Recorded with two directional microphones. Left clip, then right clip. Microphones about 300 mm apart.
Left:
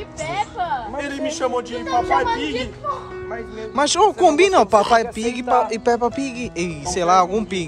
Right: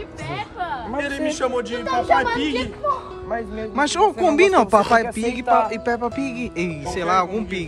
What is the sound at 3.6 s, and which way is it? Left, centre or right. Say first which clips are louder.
A man's voice: left 2 dB; centre.